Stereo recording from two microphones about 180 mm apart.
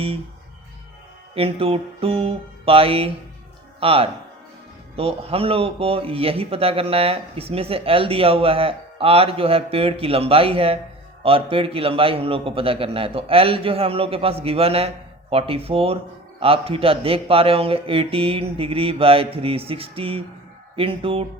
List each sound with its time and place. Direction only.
1.4 s speech: 30° right (ahead or behind)